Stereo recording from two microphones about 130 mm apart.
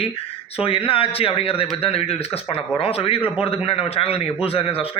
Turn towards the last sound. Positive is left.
turn(degrees=45)  # may be behind; listen again after turning